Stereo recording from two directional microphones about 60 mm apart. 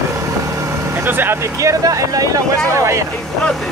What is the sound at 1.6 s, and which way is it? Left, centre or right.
Speech, right.